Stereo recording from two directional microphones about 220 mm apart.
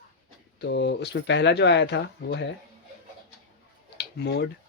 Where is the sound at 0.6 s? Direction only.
50° left (ahead or behind).